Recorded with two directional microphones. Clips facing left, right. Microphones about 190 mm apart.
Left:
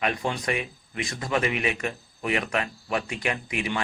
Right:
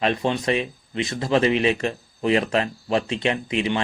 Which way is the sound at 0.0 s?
25° right (ahead or behind).